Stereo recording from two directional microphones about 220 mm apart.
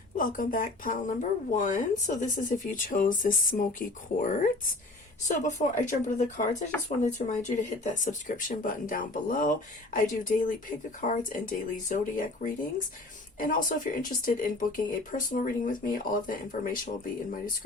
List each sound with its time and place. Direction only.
0.2 s speech: 40° left (ahead or behind)